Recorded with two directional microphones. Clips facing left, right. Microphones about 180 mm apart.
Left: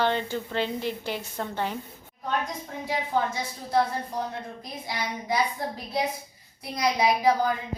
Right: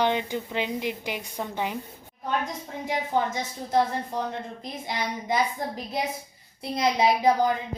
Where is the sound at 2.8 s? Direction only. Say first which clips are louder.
Right 1 dB; 20° right (ahead or behind).